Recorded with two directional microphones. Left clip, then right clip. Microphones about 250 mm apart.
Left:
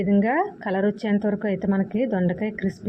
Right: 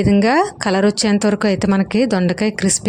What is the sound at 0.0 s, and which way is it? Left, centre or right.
Speech, right.